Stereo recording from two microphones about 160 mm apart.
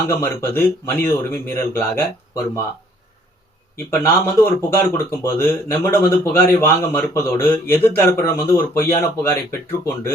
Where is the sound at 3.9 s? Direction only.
15° left (ahead or behind).